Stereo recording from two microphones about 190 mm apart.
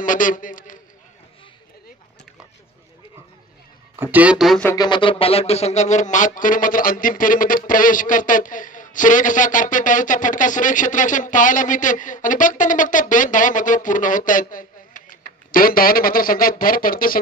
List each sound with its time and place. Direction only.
0.0 s a man's voice: 45° left (ahead or behind)
3.9 s speech: 10° right (ahead or behind)
4.6 s speech: 20° left (ahead or behind); by 17.2 s 50° left (ahead or behind)